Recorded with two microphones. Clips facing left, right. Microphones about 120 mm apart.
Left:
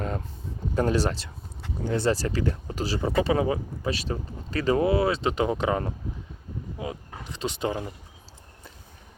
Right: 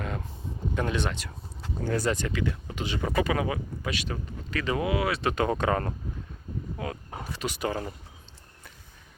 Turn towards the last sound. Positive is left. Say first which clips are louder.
# left 2 dB
turn(degrees=15)  # may be behind; listen again after turning